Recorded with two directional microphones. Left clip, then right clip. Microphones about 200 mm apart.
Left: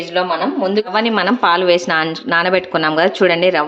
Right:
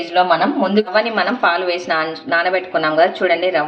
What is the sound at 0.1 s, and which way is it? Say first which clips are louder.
Speech: right 3 dB; 20° left (ahead or behind).